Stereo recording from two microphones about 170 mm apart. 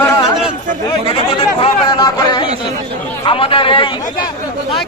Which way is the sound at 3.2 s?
30° left (ahead or behind).